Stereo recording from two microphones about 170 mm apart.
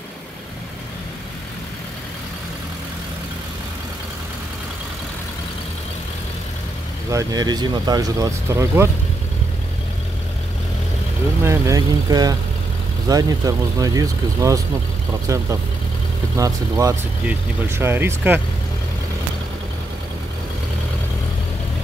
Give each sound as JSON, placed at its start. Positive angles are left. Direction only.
{"t": 7.1, "sound": "speech", "side_deg": -20}
{"t": 11.4, "sound": "speech", "side_deg": -20}
{"t": 16.3, "sound": "speech", "side_deg": -20}